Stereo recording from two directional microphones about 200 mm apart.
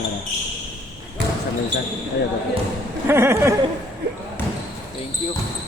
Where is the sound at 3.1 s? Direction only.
15° right (ahead or behind).